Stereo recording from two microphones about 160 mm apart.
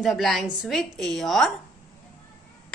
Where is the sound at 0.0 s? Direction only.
Centre (ahead or behind).